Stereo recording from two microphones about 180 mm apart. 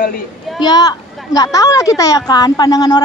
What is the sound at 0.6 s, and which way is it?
Speech, 20° left (ahead or behind).